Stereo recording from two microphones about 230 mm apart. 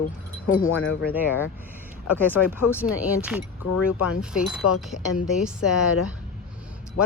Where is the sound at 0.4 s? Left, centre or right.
Left.